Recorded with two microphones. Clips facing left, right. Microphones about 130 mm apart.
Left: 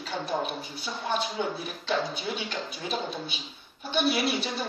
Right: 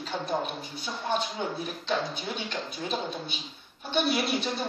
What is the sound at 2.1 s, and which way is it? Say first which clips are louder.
A woman's voice: left 1 dB; 5° left (ahead or behind).